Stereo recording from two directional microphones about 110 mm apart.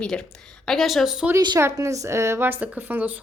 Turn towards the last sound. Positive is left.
turn(degrees=-15)  # may be behind; listen again after turning